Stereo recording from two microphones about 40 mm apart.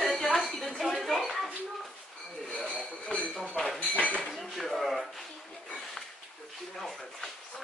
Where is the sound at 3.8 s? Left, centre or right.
Left.